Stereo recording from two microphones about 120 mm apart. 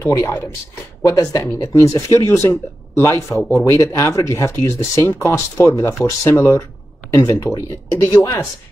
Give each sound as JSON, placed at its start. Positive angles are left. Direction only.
{"t": 0.0, "sound": "speech", "side_deg": 25}